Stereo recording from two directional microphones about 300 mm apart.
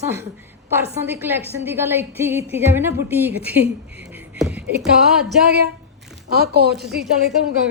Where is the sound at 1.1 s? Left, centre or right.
Centre.